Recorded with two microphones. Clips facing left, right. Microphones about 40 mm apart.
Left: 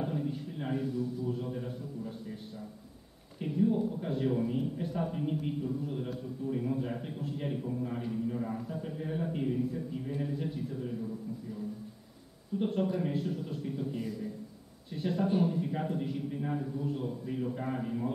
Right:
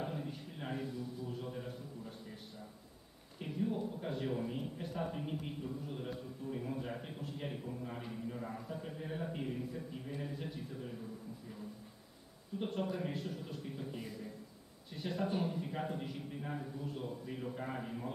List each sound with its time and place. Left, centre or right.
0.0 s a sound: centre
3.3 s a man's voice: centre
12.5 s a man's voice: centre